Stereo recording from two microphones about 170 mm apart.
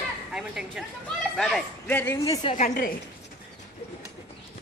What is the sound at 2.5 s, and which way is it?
Speech, 50° left (ahead or behind).